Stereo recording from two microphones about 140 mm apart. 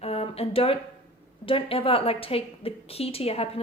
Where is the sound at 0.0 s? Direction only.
45° left (ahead or behind).